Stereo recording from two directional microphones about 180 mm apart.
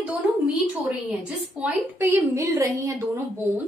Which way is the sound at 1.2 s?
10° right (ahead or behind).